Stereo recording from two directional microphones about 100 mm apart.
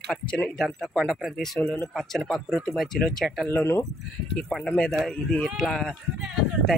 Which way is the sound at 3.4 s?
25° left (ahead or behind).